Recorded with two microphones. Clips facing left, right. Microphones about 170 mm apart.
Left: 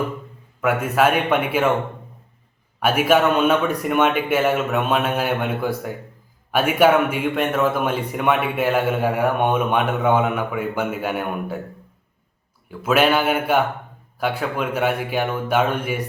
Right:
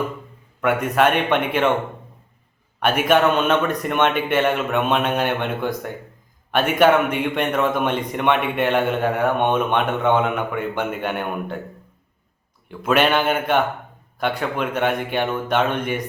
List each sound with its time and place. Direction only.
0.6 s speech: 5° left (ahead or behind)
2.8 s a man's voice: 5° left (ahead or behind)
12.6 s a man's voice: 5° left (ahead or behind)